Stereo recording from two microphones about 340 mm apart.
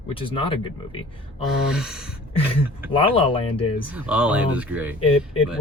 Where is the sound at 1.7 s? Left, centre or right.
Centre.